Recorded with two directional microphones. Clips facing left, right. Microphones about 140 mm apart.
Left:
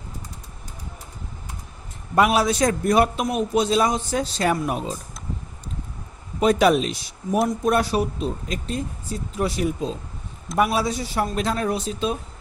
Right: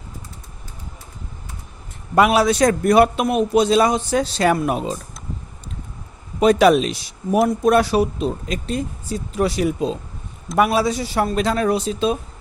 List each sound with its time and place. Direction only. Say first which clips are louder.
2.1 s a man's voice: right 4 dB; 90° right
6.4 s speech: right 4 dB; 90° right